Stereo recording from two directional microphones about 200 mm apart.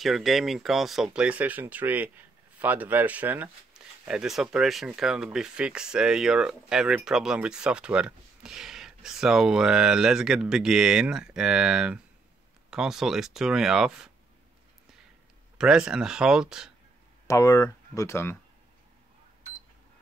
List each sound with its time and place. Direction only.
0.0 s speech: centre (ahead or behind)
15.5 s speech: 5° right (ahead or behind)
17.3 s speech: 15° left (ahead or behind)